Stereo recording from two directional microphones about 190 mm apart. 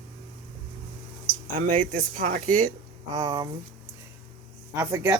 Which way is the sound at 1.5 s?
45° right (ahead or behind).